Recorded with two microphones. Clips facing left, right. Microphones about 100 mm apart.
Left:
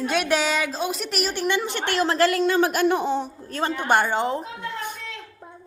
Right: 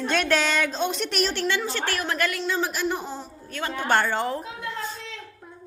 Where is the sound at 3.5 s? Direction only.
30° left (ahead or behind).